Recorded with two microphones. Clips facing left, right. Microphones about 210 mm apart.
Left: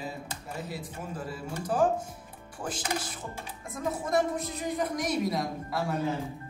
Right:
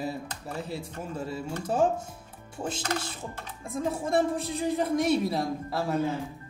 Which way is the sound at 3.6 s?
30° right (ahead or behind).